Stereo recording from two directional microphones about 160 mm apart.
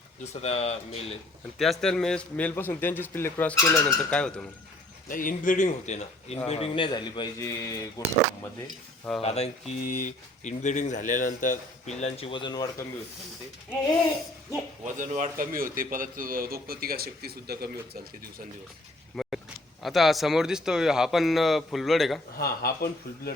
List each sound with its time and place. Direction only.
0.4 s speech: 40° left (ahead or behind)
1.5 s a man's voice: centre (ahead or behind); by 3.8 s 15° left (ahead or behind)
3.8 s speech: 5° left (ahead or behind)
5.0 s speech: 55° left (ahead or behind)
6.5 s a man's voice: 35° left (ahead or behind)
7.3 s a man's voice: 20° left (ahead or behind)
9.2 s speech: 40° left (ahead or behind)
14.9 s a man's voice: 50° right (ahead or behind); by 17.7 s 75° right (ahead or behind)
19.1 s vehicle: centre (ahead or behind)
19.8 s speech: centre (ahead or behind)
22.4 s speech: 75° left (ahead or behind)